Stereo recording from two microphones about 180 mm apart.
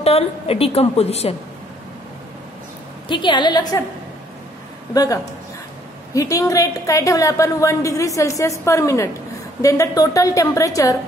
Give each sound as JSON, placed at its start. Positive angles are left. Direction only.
{"t": 0.0, "sound": "a woman's voice", "side_deg": 35}
{"t": 3.1, "sound": "a woman's voice", "side_deg": 25}
{"t": 4.9, "sound": "a woman's voice", "side_deg": 20}